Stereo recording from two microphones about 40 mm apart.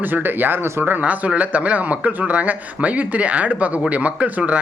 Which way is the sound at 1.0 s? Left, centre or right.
Right.